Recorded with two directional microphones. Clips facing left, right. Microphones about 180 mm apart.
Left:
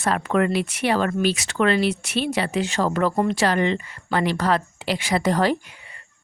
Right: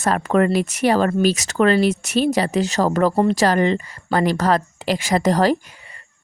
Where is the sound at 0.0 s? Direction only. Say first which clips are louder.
Right 3 dB; 45° right (ahead or behind).